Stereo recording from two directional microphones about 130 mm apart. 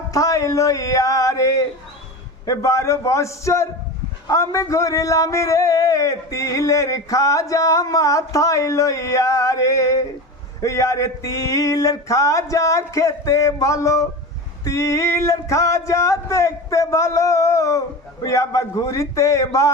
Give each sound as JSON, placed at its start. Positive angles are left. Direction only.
{"t": 0.1, "sound": "a man's voice", "side_deg": 25}